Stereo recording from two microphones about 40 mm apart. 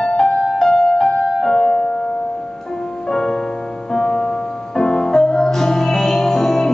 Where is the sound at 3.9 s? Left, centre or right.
Centre.